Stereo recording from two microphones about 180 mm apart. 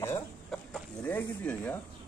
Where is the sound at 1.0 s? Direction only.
10° left (ahead or behind).